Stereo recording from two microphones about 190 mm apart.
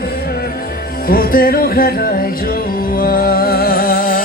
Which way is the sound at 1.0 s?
50° left (ahead or behind).